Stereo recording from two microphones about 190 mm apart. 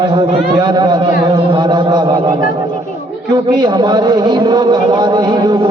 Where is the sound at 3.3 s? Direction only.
20° right (ahead or behind).